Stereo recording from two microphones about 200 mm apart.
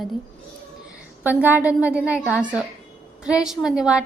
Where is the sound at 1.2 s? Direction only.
10° right (ahead or behind).